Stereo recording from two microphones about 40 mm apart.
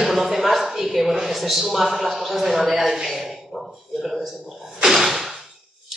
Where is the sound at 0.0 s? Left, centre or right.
Centre.